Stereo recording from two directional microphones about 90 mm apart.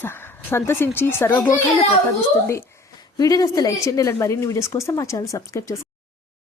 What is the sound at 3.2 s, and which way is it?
Speech, 40° left (ahead or behind).